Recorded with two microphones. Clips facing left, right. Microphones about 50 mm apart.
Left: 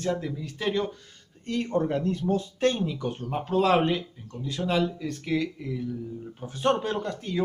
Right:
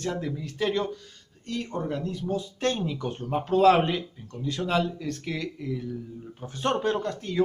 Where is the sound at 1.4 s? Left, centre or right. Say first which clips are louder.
Left 4 dB; left.